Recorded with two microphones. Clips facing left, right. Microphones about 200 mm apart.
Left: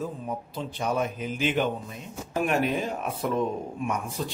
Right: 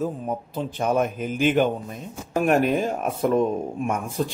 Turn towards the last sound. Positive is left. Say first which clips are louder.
# right 4 dB
turn(degrees=-50)  # may be behind; listen again after turning